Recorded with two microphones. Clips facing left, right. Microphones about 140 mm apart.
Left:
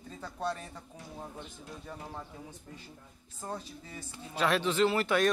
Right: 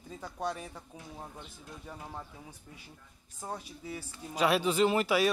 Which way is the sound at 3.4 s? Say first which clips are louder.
Left 1 dB; 10° right (ahead or behind).